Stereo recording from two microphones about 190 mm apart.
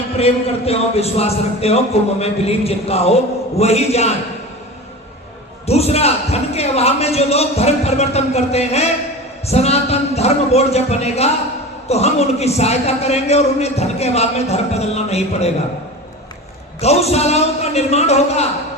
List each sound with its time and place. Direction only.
0.2 s a man's voice: 35° left (ahead or behind)
5.6 s a man's voice: 35° left (ahead or behind)
16.8 s a man's voice: 35° left (ahead or behind)